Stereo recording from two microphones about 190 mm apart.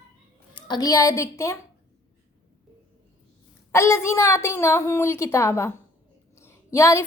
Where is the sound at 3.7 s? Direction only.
15° left (ahead or behind).